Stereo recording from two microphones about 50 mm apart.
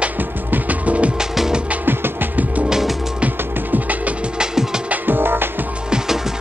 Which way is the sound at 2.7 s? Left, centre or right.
Centre.